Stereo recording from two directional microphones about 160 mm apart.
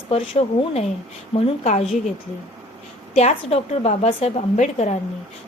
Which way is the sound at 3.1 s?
40° left (ahead or behind).